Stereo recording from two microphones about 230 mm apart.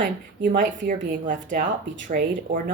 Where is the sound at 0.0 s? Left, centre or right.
Right.